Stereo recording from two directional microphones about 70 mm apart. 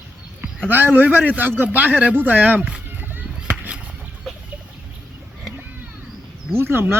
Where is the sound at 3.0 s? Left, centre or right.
Right.